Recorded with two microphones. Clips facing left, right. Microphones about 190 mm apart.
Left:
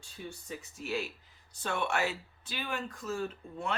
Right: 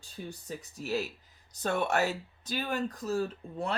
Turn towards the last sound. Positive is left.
turn(degrees=-35)  # may be behind; listen again after turning